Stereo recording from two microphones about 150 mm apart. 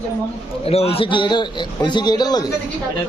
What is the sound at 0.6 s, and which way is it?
A man's voice, 40° left (ahead or behind).